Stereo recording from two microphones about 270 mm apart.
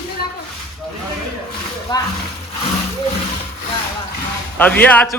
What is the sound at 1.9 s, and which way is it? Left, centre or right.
Speech, centre.